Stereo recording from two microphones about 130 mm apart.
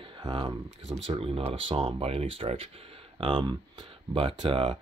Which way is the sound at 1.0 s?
45° right (ahead or behind).